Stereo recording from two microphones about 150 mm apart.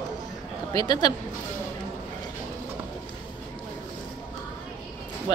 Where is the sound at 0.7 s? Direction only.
25° left (ahead or behind).